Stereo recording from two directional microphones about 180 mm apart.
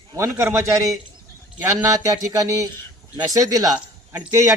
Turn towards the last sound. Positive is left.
turn(degrees=-15)  # may be behind; listen again after turning